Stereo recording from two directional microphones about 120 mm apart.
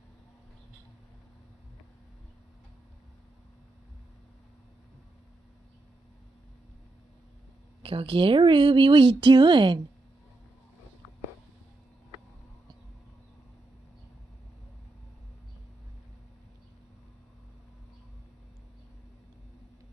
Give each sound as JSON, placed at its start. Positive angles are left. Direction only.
{"t": 7.8, "sound": "speech", "side_deg": -50}